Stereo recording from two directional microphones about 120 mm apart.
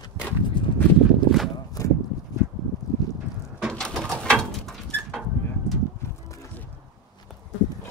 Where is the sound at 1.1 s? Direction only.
Centre (ahead or behind).